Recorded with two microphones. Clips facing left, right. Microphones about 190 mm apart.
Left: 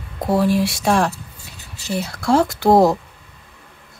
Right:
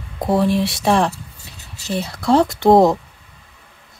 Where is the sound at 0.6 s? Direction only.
25° right (ahead or behind).